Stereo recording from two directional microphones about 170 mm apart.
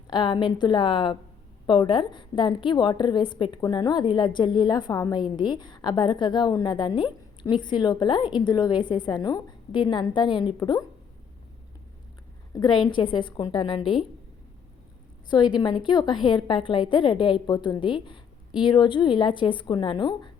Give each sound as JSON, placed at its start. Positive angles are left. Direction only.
{"t": 0.1, "sound": "a woman's voice", "side_deg": 25}
{"t": 12.5, "sound": "a woman's voice", "side_deg": 25}
{"t": 15.3, "sound": "a woman's voice", "side_deg": 25}